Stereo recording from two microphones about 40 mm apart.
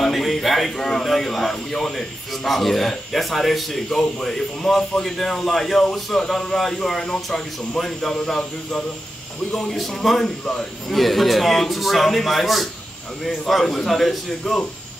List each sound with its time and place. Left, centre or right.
0.0 s speech: centre
9.6 s a man's voice: centre
10.2 s a man's voice: centre
10.9 s a man's voice: centre